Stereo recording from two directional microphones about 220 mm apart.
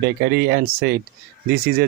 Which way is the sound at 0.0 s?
50° right (ahead or behind).